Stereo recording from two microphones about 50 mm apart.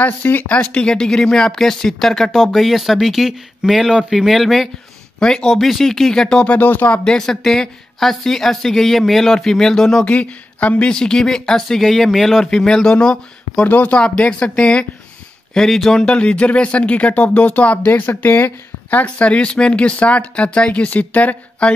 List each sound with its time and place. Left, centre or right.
0.0 s speech: left
0.7 s speech: centre
5.2 s speech: centre
5.5 s speech: centre
6.4 s speech: left
7.1 s speech: centre
10.0 s speech: left
10.9 s speech: centre
13.7 s speech: left
15.5 s speech: centre
16.1 s speech: left
17.8 s speech: left
19.0 s speech: left
21.6 s speech: centre